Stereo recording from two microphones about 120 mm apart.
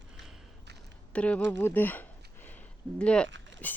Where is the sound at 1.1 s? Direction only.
10° left (ahead or behind).